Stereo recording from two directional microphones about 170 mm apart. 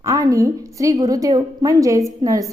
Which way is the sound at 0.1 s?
20° right (ahead or behind).